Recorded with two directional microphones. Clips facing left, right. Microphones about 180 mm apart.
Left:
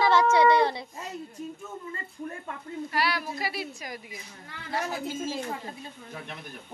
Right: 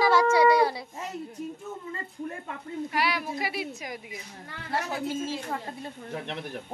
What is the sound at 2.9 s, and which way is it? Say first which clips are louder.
A woman's voice: even; 20° right (ahead or behind).